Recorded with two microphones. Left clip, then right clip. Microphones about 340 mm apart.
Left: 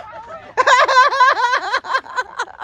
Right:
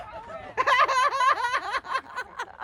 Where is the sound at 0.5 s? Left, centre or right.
Centre.